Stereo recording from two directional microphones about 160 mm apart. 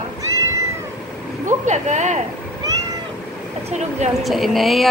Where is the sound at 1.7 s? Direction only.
50° right (ahead or behind).